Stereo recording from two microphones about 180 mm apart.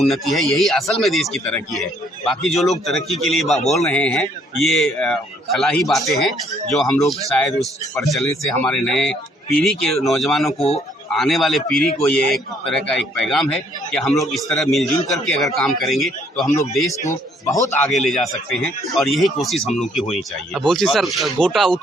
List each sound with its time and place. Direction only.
0.0 s speech: centre (ahead or behind)
10.6 s speech: 35° left (ahead or behind)
11.1 s speech: centre (ahead or behind)
17.1 s a man's voice: 15° left (ahead or behind)
17.7 s speech: centre (ahead or behind)